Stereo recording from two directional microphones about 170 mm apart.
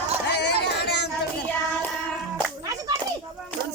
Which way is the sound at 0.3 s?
80° left.